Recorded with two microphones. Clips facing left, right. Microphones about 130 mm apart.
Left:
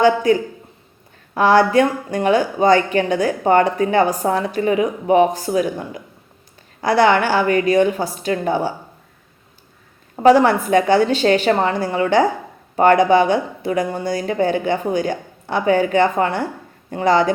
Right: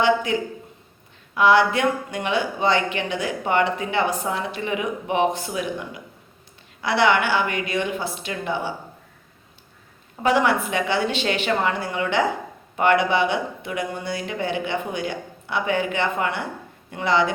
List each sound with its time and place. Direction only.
0.0 s speech: 40° left (ahead or behind)
10.2 s speech: 40° left (ahead or behind)